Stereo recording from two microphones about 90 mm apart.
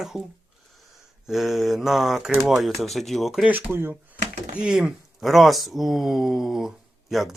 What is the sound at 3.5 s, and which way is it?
Speech, 20° right (ahead or behind).